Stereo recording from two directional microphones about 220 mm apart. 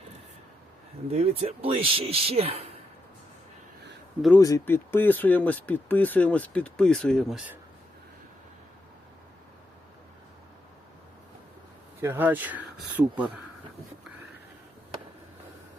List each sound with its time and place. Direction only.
1.1 s speech: 30° right (ahead or behind)
4.4 s speech: 15° left (ahead or behind); by 7.6 s 5° right (ahead or behind)
11.9 s speech: 10° right (ahead or behind)